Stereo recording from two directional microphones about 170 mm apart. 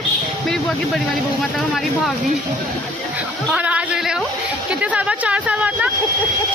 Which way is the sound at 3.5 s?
5° right (ahead or behind).